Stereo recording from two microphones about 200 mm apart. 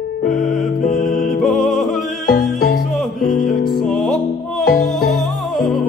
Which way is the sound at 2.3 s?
50° left (ahead or behind).